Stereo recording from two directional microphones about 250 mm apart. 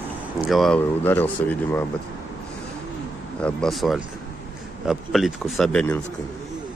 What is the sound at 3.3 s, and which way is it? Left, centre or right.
Speech, centre.